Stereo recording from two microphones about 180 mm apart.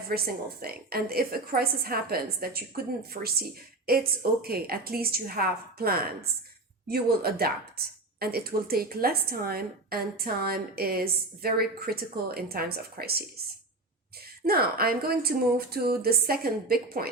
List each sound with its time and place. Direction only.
0.1 s a woman's voice: 55° right (ahead or behind)
14.4 s a woman's voice: 55° right (ahead or behind)